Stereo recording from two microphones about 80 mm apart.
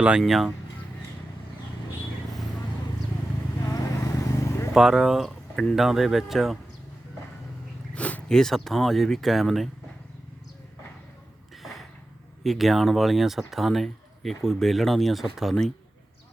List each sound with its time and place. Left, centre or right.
0.2 s speech: centre
3.7 s vehicle: left
4.7 s speech: centre
7.9 s a sound: centre
8.3 s speech: centre
12.4 s speech: centre